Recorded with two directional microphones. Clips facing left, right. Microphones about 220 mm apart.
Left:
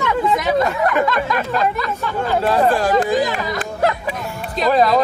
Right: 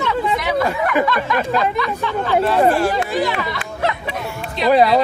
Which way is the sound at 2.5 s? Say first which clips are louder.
Right 1 dB; 15° right (ahead or behind).